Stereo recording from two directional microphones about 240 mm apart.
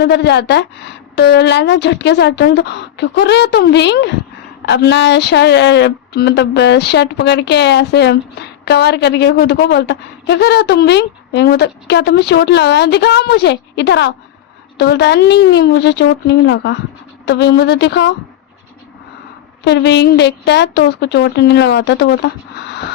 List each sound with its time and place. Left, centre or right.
0.0 s speech: left
19.6 s speech: left